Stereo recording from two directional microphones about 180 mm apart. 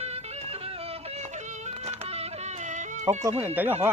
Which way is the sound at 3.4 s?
10° right (ahead or behind).